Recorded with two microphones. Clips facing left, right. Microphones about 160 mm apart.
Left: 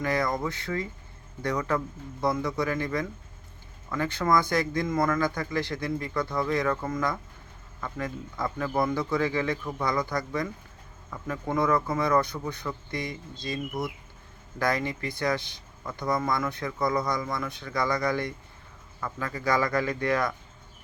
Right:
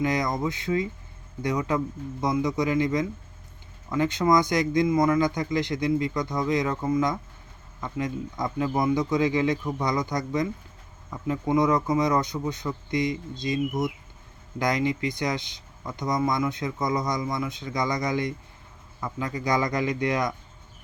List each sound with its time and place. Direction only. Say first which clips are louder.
0.0 s speech: right 2 dB; 15° right (ahead or behind)